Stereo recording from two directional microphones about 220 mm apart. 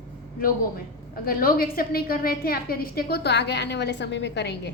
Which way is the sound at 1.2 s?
40° left (ahead or behind).